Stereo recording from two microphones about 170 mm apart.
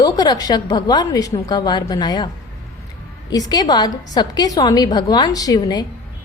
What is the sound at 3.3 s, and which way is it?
A woman's voice, 25° left (ahead or behind).